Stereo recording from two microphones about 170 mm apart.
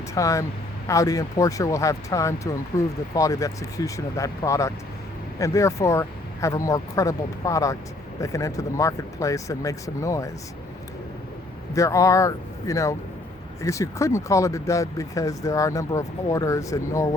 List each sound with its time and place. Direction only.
0.1 s speech: 20° left (ahead or behind)
11.7 s speech: 20° left (ahead or behind)